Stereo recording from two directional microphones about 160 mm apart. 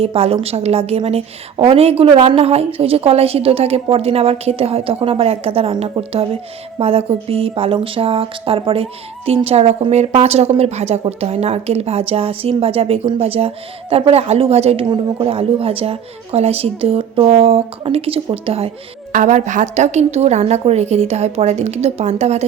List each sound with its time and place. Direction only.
0.0 s speech: 35° right (ahead or behind)
19.1 s a woman's voice: 50° right (ahead or behind)